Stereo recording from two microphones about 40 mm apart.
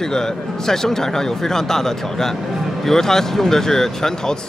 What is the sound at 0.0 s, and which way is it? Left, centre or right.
Speech, centre.